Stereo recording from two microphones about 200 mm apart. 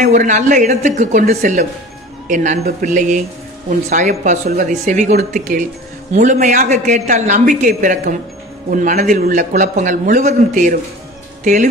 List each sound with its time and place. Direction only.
0.0 s speech: 35° right (ahead or behind)